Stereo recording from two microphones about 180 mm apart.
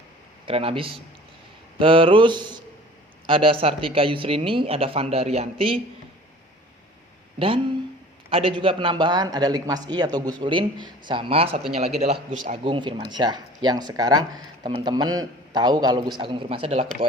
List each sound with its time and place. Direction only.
0.4 s speech: 30° right (ahead or behind)
7.3 s speech: 30° right (ahead or behind)
12.6 s speech: 25° right (ahead or behind)